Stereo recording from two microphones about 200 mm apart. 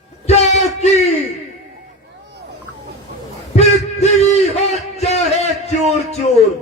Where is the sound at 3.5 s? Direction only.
35° left (ahead or behind).